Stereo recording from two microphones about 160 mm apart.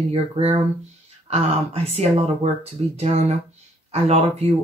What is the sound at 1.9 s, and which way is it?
Speech, 40° right (ahead or behind).